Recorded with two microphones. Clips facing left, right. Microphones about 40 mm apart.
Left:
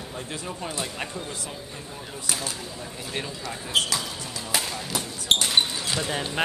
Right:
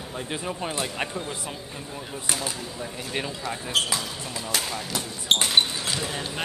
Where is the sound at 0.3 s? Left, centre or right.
Right.